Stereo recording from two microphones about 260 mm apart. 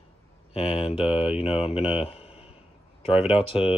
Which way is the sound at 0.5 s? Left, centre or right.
Left.